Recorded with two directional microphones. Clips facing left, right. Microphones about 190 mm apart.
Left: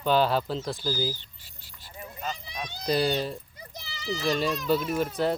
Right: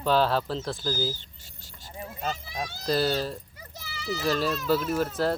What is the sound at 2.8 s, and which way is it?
Speech, centre (ahead or behind).